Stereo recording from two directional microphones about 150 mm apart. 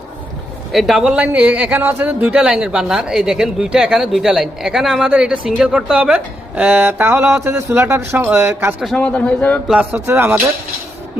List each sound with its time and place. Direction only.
0.7 s speech: centre (ahead or behind)
8.8 s speech: 5° left (ahead or behind)
9.6 s speech: 5° right (ahead or behind)